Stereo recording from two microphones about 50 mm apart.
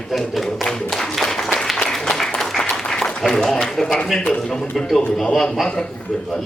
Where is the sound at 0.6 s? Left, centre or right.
Centre.